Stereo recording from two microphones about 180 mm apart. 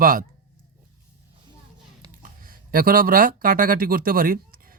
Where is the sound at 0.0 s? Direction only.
50° right (ahead or behind).